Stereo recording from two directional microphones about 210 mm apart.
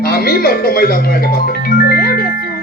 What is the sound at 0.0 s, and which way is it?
Speech, 45° left (ahead or behind).